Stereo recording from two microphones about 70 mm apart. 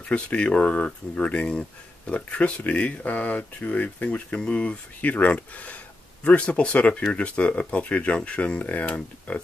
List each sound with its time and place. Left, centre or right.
0.1 s speech: centre